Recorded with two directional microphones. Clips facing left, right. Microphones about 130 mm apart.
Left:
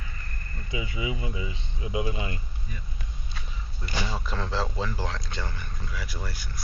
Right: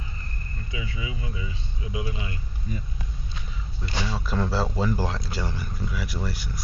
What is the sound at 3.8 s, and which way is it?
Speech, 10° left (ahead or behind).